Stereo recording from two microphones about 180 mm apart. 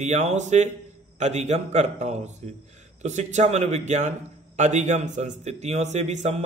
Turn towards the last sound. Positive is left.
turn(degrees=-40)  # may be behind; listen again after turning